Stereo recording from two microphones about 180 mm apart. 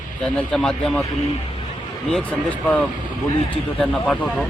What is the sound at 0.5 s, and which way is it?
Speech, 5° left (ahead or behind).